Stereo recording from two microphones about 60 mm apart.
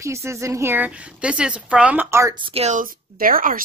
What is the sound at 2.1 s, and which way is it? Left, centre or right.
Speech, right.